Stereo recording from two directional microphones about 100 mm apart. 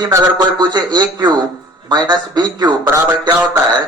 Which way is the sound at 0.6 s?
45° right (ahead or behind).